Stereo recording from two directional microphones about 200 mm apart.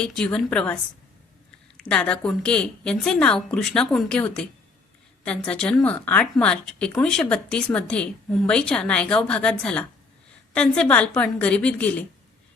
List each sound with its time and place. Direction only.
0.0 s a woman's voice: 5° left (ahead or behind)